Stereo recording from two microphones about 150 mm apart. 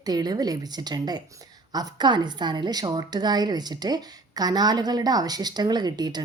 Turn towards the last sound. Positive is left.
turn(degrees=-30)  # may be behind; listen again after turning